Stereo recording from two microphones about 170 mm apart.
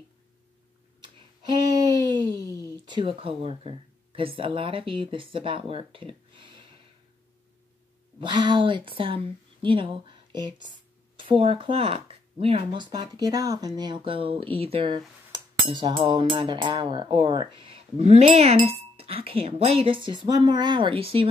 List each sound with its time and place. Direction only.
1.0 s a sound: 25° right (ahead or behind)
2.6 s speech: 30° right (ahead or behind)
8.2 s speech: 25° right (ahead or behind)